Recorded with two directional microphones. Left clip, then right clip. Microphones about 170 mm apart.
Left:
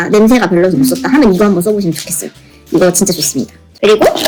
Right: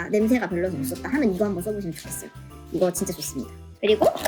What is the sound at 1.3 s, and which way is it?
Speech, centre (ahead or behind).